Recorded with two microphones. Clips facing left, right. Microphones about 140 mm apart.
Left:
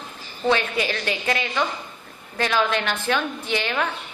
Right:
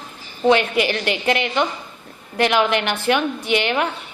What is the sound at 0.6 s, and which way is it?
Speech, 70° right (ahead or behind).